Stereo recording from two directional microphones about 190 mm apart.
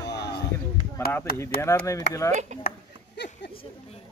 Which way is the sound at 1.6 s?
15° left (ahead or behind).